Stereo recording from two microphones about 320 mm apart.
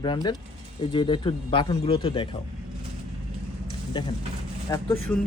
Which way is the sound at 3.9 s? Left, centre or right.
Centre.